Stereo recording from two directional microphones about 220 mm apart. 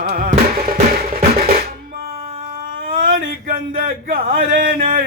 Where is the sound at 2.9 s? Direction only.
40° right (ahead or behind).